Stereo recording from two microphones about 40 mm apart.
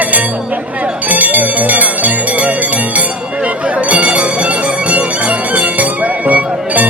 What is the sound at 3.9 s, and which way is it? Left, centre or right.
Bell, right.